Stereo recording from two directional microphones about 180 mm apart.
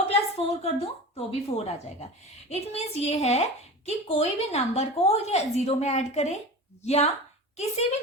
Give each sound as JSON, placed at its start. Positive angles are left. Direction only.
{"t": 0.1, "sound": "a woman's voice", "side_deg": 35}